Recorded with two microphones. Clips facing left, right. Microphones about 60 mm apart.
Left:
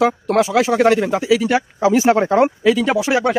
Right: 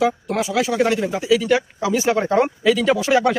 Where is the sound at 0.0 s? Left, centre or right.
Left.